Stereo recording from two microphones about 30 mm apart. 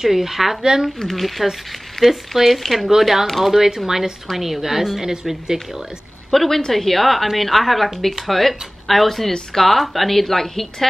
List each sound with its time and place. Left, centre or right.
0.0 s a woman's voice: centre
1.0 s a woman's voice: centre
6.3 s a woman's voice: centre